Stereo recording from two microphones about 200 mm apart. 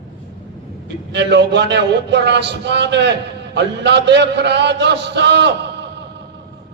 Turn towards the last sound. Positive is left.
turn(degrees=-60)  # may be behind; listen again after turning